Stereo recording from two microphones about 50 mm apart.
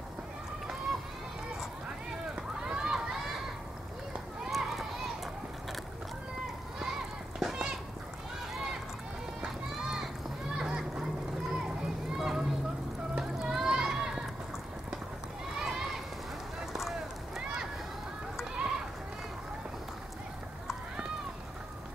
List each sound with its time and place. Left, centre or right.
2.6 s run: centre
4.5 s run: centre
6.8 s a sound: centre
9.4 s run: centre
10.6 s splash: centre
11.5 s children playing: centre
13.1 s a sound: centre
15.5 s run: centre
17.4 s a sound: centre